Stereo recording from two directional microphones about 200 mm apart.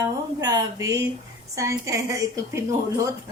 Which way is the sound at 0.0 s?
15° right (ahead or behind).